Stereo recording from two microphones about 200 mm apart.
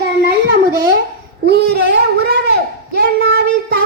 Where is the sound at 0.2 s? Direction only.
55° right (ahead or behind).